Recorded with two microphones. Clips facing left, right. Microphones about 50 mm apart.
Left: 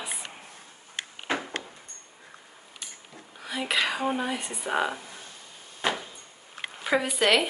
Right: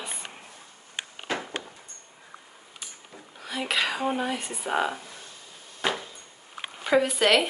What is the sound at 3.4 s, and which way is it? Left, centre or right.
A woman's voice, centre.